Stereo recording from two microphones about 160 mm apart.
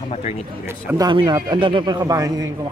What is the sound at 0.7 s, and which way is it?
A man's voice, 20° right (ahead or behind).